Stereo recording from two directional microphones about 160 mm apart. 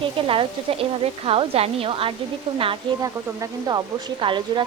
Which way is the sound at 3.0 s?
25° right (ahead or behind).